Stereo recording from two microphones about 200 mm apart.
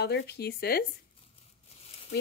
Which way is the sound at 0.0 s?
60° left (ahead or behind).